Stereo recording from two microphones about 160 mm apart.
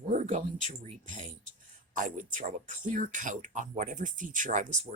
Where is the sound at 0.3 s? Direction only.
45° right (ahead or behind).